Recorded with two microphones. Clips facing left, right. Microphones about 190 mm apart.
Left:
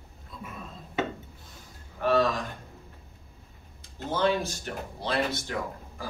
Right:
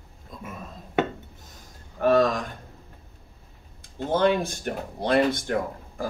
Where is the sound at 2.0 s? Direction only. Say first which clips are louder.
Right 4 dB; 45° right (ahead or behind).